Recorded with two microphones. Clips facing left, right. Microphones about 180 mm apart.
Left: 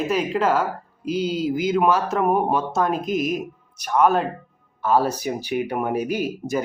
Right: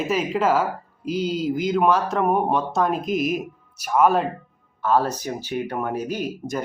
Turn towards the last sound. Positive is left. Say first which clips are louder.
# left 3 dB
turn(degrees=5)  # may be behind; listen again after turning